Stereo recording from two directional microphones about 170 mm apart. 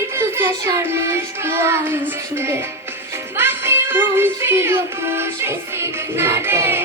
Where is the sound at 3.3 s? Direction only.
15° right (ahead or behind).